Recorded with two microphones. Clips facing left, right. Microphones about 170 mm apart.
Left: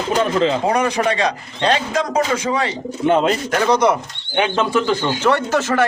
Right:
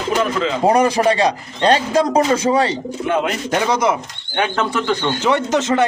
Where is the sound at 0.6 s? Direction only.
35° right (ahead or behind).